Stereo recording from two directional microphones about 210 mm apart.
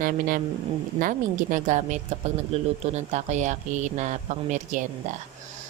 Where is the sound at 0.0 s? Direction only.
40° right (ahead or behind).